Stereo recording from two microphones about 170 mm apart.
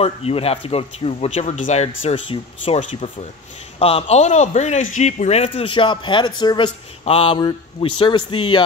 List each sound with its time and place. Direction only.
0.0 s speech: 35° left (ahead or behind)
2.8 s a man's voice: 40° left (ahead or behind)